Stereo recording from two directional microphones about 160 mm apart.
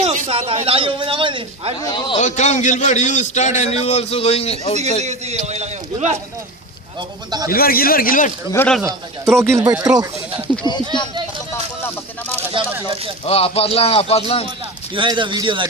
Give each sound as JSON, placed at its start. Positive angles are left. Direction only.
{"t": 0.0, "sound": "a man's voice", "side_deg": -40}
{"t": 1.8, "sound": "a man's voice", "side_deg": 25}
{"t": 2.1, "sound": "a man's voice", "side_deg": 50}
{"t": 4.8, "sound": "a man's voice", "side_deg": -45}
{"t": 7.3, "sound": "speech", "side_deg": -25}
{"t": 7.5, "sound": "speech", "side_deg": 65}
{"t": 8.5, "sound": "speech", "side_deg": 5}
{"t": 8.8, "sound": "speech", "side_deg": -15}
{"t": 13.2, "sound": "speech", "side_deg": 40}
{"t": 14.9, "sound": "speech", "side_deg": -30}